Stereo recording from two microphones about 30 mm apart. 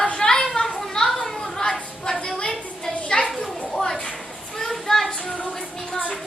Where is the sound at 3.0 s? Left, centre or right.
Left.